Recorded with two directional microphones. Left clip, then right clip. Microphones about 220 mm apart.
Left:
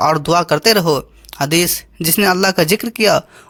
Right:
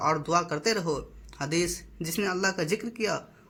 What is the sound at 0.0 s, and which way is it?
Speech, 45° left (ahead or behind).